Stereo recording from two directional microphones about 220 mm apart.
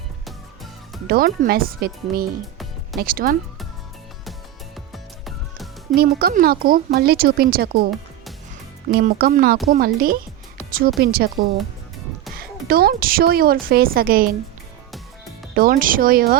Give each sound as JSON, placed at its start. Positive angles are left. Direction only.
{"t": 1.0, "sound": "speech", "side_deg": -45}
{"t": 4.3, "sound": "music", "side_deg": 0}
{"t": 6.0, "sound": "speech", "side_deg": -45}
{"t": 8.9, "sound": "speech", "side_deg": -45}
{"t": 12.6, "sound": "speech", "side_deg": -45}
{"t": 15.5, "sound": "speech", "side_deg": -40}